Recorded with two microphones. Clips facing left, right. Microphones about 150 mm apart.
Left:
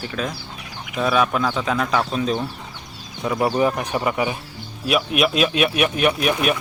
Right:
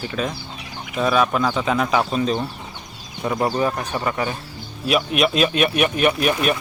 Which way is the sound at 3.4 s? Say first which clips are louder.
Left 2 dB; 15° left (ahead or behind).